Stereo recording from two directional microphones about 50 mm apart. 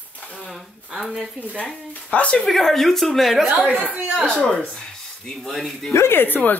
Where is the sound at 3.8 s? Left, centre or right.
Right.